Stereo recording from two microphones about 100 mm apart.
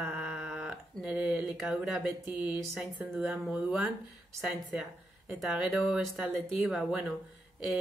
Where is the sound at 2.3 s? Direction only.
55° left (ahead or behind).